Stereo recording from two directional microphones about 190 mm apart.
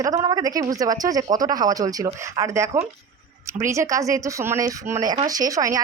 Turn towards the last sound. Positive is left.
turn(degrees=-15)  # may be behind; listen again after turning